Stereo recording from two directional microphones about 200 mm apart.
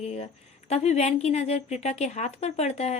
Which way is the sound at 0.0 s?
30° left (ahead or behind).